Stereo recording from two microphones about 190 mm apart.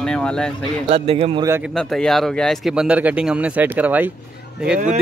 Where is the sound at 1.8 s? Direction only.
Centre (ahead or behind).